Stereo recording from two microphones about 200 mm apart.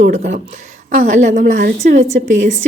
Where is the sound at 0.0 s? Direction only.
35° right (ahead or behind).